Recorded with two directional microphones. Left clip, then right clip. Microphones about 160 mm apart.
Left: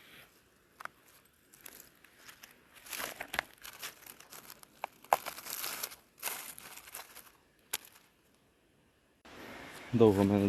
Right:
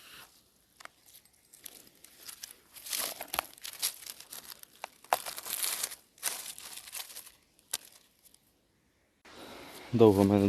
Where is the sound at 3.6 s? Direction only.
10° right (ahead or behind); by 5.4 s 10° left (ahead or behind).